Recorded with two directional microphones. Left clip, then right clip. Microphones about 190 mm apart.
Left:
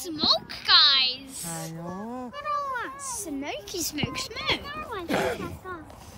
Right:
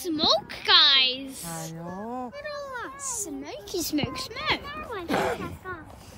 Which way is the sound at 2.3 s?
Centre (ahead or behind).